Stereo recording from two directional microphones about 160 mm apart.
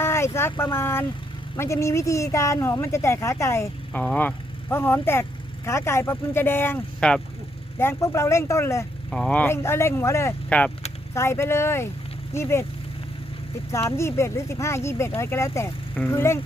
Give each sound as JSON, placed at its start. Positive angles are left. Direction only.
{"t": 0.0, "sound": "vehicle", "side_deg": 15}
{"t": 0.5, "sound": "speech", "side_deg": 15}
{"t": 9.0, "sound": "speech", "side_deg": 5}
{"t": 13.9, "sound": "speech", "side_deg": 15}